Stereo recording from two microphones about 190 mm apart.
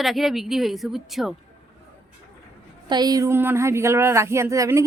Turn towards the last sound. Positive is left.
turn(degrees=-15)  # may be behind; listen again after turning